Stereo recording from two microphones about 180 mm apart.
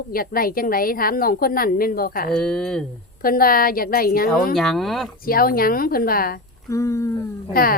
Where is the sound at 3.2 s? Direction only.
55° left (ahead or behind).